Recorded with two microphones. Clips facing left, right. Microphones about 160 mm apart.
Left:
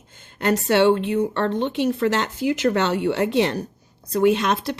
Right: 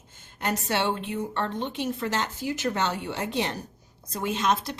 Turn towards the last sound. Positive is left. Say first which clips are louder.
# left 7 dB
turn(degrees=65)  # may be behind; listen again after turning